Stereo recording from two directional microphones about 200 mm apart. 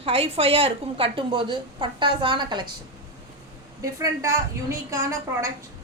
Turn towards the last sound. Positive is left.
turn(degrees=-15)  # may be behind; listen again after turning